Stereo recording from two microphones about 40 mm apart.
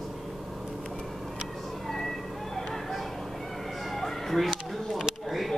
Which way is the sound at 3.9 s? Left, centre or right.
Centre.